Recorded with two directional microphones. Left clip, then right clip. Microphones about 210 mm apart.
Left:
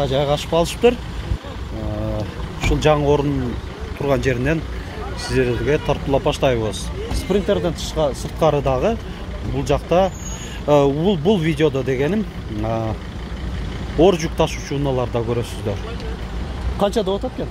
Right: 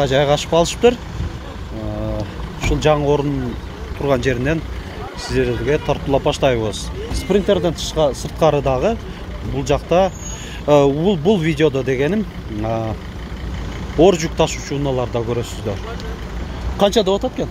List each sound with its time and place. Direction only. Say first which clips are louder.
0.0 s speech: right 4 dB; 20° right (ahead or behind)
2.1 s vehicle: even; centre (ahead or behind)
4.0 s speech: right 2 dB; 10° right (ahead or behind)
7.3 s speech: right 3 dB; 25° right (ahead or behind); by 12.9 s 5° right (ahead or behind)
13.9 s speech: right 2 dB; 10° right (ahead or behind)
16.7 s speech: right 4 dB; 20° right (ahead or behind)